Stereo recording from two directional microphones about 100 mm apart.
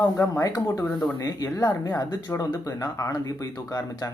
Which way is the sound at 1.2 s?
40° left (ahead or behind).